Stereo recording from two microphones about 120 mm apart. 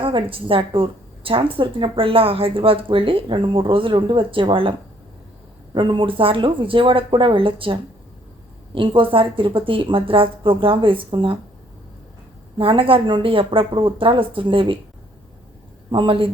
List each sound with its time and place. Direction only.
0.0 s a woman's voice: 45° right (ahead or behind)
5.7 s a woman's voice: 45° right (ahead or behind)
12.5 s a woman's voice: 50° right (ahead or behind)
15.9 s a woman's voice: 45° right (ahead or behind)